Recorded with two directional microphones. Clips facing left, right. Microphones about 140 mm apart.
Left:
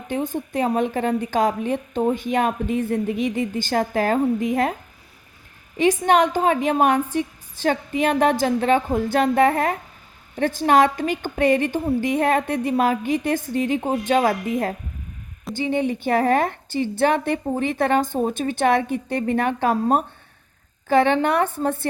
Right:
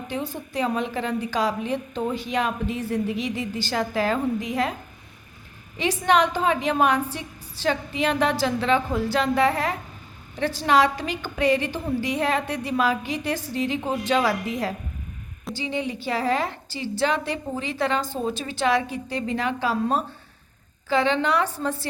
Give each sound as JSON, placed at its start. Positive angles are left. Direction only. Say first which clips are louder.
{"t": 0.1, "sound": "a woman's voice", "louder": "left 7 dB", "side_deg": 50}
{"t": 5.8, "sound": "a woman's voice", "louder": "left 4 dB", "side_deg": 50}
{"t": 15.5, "sound": "a woman's voice", "louder": "left 6 dB", "side_deg": 50}